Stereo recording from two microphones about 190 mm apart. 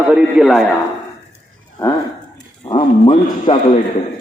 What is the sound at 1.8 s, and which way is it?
Speech, 15° left (ahead or behind).